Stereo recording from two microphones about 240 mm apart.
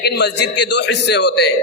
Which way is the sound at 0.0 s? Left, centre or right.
Left.